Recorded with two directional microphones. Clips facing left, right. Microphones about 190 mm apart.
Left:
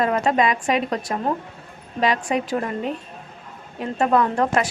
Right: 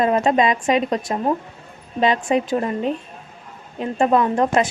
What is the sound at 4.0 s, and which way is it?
Speech, 20° right (ahead or behind).